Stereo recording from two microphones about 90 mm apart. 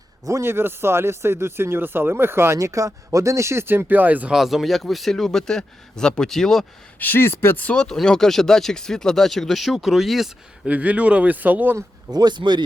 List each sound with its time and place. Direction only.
0.3 s speech: 30° right (ahead or behind)
4.3 s speech: 5° right (ahead or behind)
7.0 s speech: 25° left (ahead or behind); by 10.3 s 5° right (ahead or behind)
10.7 s speech: 15° right (ahead or behind)
12.1 s speech: 55° right (ahead or behind)